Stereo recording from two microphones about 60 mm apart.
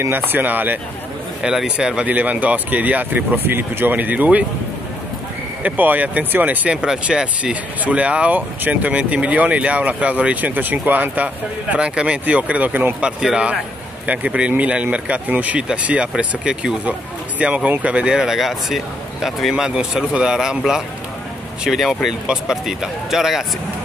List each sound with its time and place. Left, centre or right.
0.0 s speech: right
1.4 s speech: centre
2.0 s speech: right
5.6 s speech: right
11.7 s speech: centre
13.0 s speech: centre
14.0 s speech: right; by 23.4 s centre